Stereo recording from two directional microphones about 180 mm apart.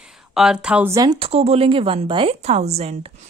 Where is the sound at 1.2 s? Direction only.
35° right (ahead or behind).